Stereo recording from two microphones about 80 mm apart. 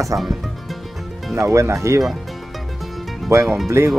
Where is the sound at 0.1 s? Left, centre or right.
Right.